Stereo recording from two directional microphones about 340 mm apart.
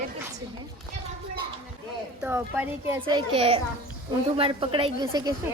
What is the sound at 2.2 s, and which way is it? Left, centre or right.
A child's voice, centre.